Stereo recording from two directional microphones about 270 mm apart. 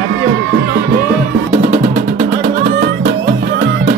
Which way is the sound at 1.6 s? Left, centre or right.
Right.